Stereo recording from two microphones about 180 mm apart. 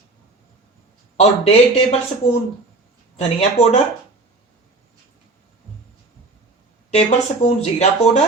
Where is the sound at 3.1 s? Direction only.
35° left (ahead or behind).